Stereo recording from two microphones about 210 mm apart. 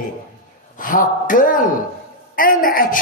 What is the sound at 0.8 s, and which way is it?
A man's voice, 40° left (ahead or behind).